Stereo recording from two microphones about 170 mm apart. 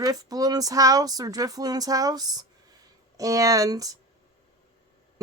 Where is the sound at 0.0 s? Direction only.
20° right (ahead or behind).